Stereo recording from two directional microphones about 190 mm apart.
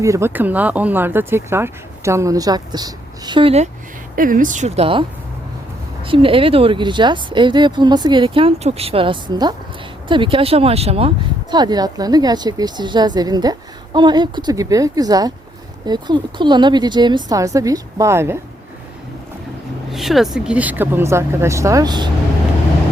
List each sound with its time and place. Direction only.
0.0 s speech: 15° right (ahead or behind); by 3.7 s 30° right (ahead or behind)
4.1 s speech: 45° right (ahead or behind); by 5.0 s 30° right (ahead or behind)
6.1 s speech: 30° right (ahead or behind)
19.9 s speech: centre (ahead or behind); by 22.1 s 20° right (ahead or behind)